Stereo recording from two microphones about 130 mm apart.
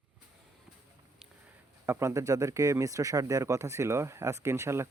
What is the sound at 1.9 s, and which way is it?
Speech, 20° right (ahead or behind).